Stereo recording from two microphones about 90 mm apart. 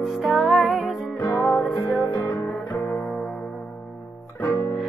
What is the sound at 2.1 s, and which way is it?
Music, 35° left (ahead or behind).